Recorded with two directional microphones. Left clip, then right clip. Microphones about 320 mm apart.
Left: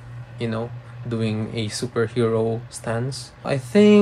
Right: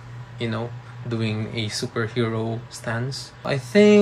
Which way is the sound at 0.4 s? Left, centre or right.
Centre.